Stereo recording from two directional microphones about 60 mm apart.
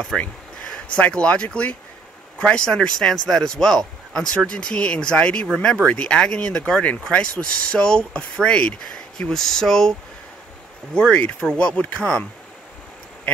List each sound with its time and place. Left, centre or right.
0.1 s speech: centre
11.0 s speech: centre